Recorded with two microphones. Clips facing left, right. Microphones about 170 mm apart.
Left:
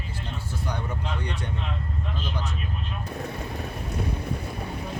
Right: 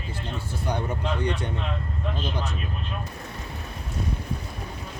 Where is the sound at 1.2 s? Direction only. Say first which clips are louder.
Right 6 dB; 25° right (ahead or behind).